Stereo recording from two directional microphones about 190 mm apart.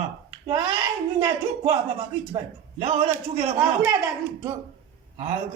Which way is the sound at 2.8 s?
35° right (ahead or behind).